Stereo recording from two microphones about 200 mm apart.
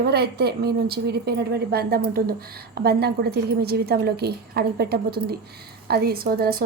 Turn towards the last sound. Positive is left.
turn(degrees=-50)  # may be behind; listen again after turning